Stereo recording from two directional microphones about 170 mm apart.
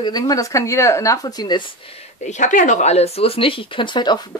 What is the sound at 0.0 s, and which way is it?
Speech, 25° left (ahead or behind).